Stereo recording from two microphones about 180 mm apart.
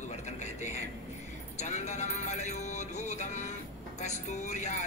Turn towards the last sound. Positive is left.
turn(degrees=40)  # may be behind; listen again after turning